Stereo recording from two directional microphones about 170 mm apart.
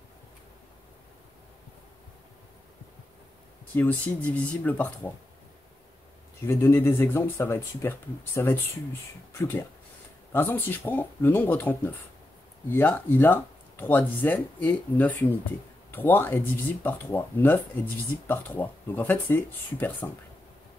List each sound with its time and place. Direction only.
3.7 s speech: 10° left (ahead or behind)
6.4 s speech: 15° left (ahead or behind)